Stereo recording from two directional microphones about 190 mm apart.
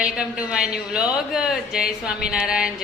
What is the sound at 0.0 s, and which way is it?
A man's voice, 5° right (ahead or behind).